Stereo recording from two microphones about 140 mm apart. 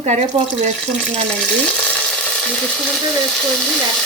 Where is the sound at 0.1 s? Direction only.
55° right (ahead or behind).